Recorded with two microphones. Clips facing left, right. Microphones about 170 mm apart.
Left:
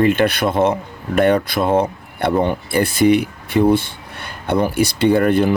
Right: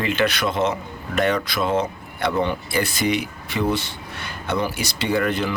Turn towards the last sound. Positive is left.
turn(degrees=55)  # may be behind; listen again after turning